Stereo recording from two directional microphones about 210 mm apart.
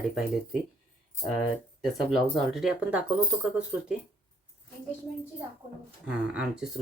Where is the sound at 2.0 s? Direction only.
Centre (ahead or behind).